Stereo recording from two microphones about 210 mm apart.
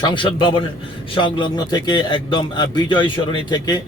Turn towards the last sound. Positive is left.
turn(degrees=20)  # may be behind; listen again after turning